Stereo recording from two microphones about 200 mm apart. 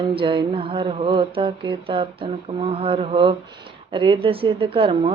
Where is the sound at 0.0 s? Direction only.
25° right (ahead or behind).